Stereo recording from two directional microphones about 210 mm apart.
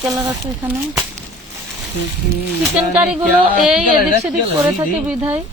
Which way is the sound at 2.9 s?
5° right (ahead or behind).